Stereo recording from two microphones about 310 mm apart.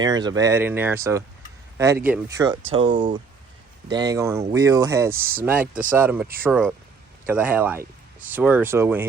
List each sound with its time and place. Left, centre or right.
0.0 s speech: centre